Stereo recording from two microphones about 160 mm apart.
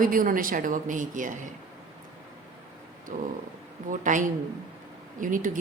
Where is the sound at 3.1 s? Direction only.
55° right (ahead or behind).